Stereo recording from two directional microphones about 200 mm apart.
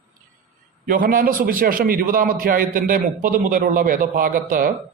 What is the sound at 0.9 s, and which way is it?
A man's voice, 45° right (ahead or behind).